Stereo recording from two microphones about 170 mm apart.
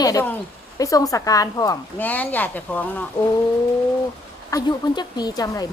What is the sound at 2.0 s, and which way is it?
Speech, 10° left (ahead or behind).